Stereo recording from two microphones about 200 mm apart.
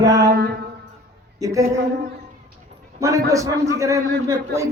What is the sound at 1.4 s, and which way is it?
Speech, 15° right (ahead or behind).